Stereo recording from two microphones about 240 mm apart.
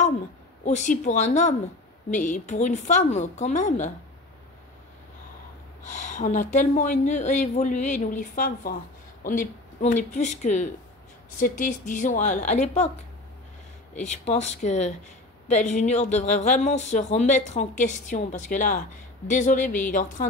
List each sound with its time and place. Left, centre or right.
0.7 s a woman's voice: left
5.9 s speech: left
14.0 s a woman's voice: left